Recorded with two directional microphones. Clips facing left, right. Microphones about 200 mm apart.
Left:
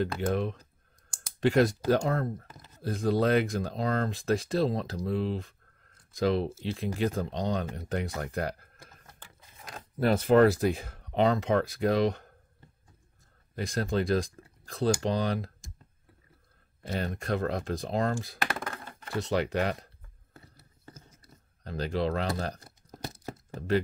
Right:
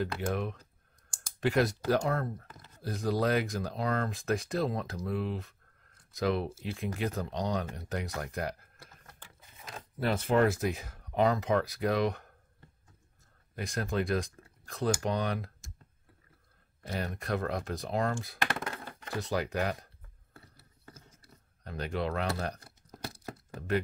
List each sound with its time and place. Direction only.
0.3 s speech: 30° left (ahead or behind)
9.9 s speech: 40° left (ahead or behind)
13.6 s speech: 30° left (ahead or behind)
16.8 s speech: 25° left (ahead or behind)
20.3 s a sound: 20° left (ahead or behind)
21.6 s speech: 35° left (ahead or behind)